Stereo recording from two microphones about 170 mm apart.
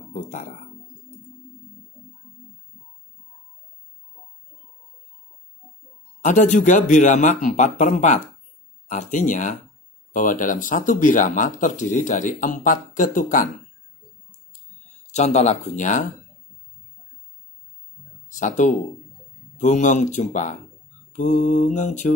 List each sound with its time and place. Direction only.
0.1 s music: 50° left (ahead or behind)
6.2 s speech: 45° left (ahead or behind)
15.0 s speech: 40° left (ahead or behind)
18.4 s speech: 45° left (ahead or behind)